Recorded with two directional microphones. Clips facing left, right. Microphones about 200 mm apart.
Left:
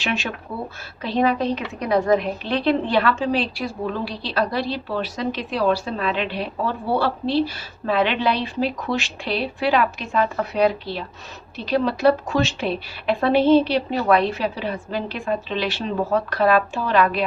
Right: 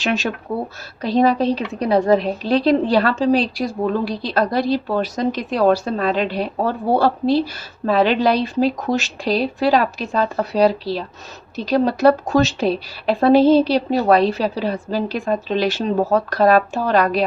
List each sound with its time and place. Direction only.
0.0 s a woman's voice: 40° right (ahead or behind)